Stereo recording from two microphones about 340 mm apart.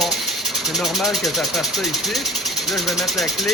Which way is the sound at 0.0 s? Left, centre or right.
Centre.